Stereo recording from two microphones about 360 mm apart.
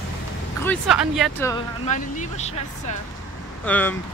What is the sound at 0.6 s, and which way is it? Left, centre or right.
Speech, centre.